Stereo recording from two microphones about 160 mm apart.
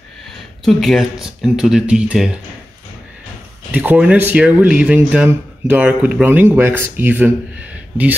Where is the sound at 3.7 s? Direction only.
10° right (ahead or behind).